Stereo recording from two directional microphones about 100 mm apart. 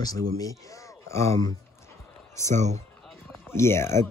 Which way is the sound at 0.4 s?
35° left (ahead or behind).